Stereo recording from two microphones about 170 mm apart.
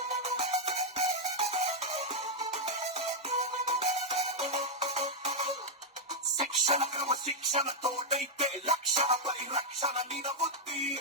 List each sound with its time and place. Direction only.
0.2 s music: 40° right (ahead or behind)